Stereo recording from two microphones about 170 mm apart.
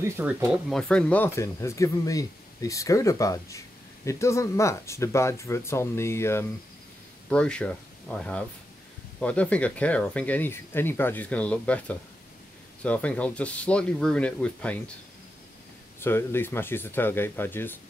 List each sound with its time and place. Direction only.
0.0 s speech: 15° right (ahead or behind); by 14.8 s 5° left (ahead or behind)
16.0 s speech: 15° left (ahead or behind)